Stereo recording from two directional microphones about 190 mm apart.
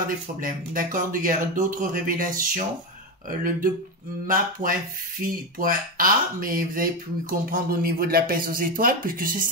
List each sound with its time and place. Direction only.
0.4 s speech: 45° right (ahead or behind)